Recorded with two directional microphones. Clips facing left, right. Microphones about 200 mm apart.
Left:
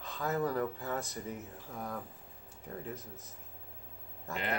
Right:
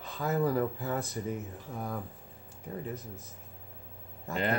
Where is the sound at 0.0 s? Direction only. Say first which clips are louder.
Right 4 dB; 5° right (ahead or behind).